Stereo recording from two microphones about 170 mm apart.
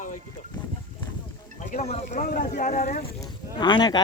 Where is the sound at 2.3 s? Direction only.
50° left (ahead or behind).